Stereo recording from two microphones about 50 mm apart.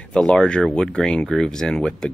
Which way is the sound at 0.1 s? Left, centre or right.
Centre.